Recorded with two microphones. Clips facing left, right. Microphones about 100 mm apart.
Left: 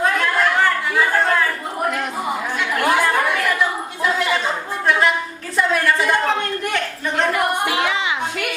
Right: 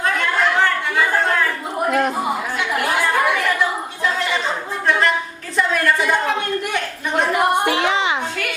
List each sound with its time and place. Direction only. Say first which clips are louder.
0.0 s chatter: left 1 dB; 5° left (ahead or behind)
4.9 s a sound: even; 5° left (ahead or behind)
7.3 s child singing: right 2 dB; 30° right (ahead or behind)